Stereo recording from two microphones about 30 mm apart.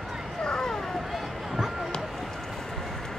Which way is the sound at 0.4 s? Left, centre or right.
Left.